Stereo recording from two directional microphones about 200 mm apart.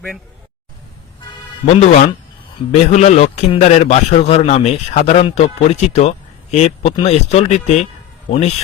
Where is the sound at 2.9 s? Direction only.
35° left (ahead or behind).